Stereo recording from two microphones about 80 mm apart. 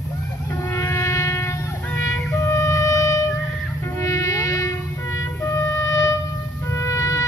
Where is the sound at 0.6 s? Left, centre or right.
Left.